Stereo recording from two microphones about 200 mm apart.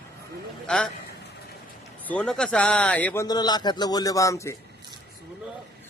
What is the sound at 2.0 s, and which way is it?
Speech, 5° left (ahead or behind).